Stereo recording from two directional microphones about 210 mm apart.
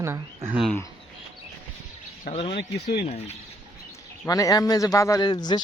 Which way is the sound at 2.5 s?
50° left (ahead or behind).